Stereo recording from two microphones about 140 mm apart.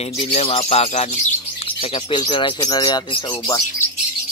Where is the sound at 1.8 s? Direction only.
35° left (ahead or behind).